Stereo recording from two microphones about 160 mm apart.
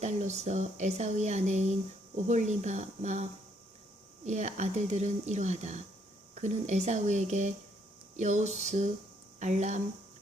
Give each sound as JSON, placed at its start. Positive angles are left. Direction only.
{"t": 0.0, "sound": "speech", "side_deg": -45}
{"t": 4.3, "sound": "speech", "side_deg": -45}